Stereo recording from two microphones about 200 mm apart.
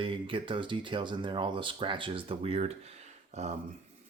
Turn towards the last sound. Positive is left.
turn(degrees=-35)  # may be behind; listen again after turning